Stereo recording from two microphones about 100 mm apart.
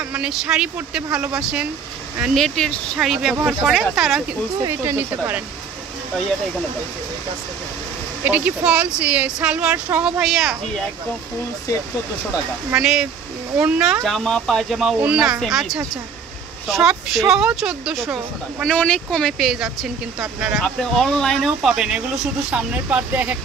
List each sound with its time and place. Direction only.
0.1 s speech: 10° right (ahead or behind)
2.3 s speech: 5° left (ahead or behind)
3.0 s speech: 5° right (ahead or behind)
4.6 s speech: 25° right (ahead or behind)
8.2 s speech: 15° right (ahead or behind)
10.2 s speech: centre (ahead or behind)
12.7 s speech: 5° right (ahead or behind)
14.0 s speech: 5° left (ahead or behind)
18.6 s speech: 10° left (ahead or behind)
19.3 s speech: 5° right (ahead or behind)
20.5 s speech: 5° left (ahead or behind); by 23.3 s 15° right (ahead or behind)